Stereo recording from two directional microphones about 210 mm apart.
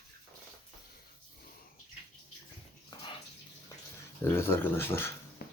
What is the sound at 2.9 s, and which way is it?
Bathtub, 20° left (ahead or behind).